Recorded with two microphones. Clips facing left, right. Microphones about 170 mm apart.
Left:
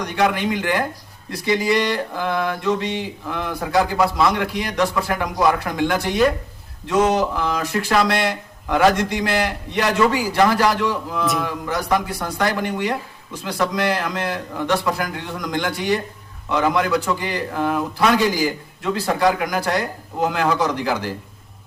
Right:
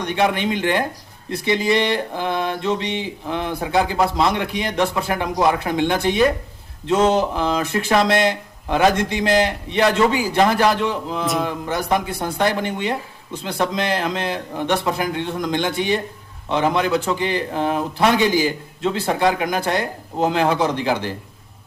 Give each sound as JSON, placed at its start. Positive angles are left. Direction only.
{"t": 0.0, "sound": "a man's voice", "side_deg": -25}